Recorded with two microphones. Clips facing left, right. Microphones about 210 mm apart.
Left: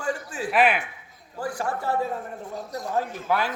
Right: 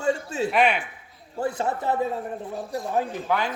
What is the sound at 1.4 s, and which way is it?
Speech, 25° right (ahead or behind).